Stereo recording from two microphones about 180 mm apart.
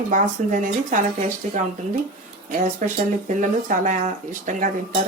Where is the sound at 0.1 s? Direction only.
45° right (ahead or behind).